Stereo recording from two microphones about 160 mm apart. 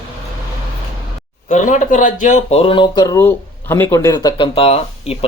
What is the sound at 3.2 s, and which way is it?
Speech, 15° left (ahead or behind).